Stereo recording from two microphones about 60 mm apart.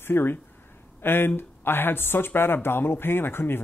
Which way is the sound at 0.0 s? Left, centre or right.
Left.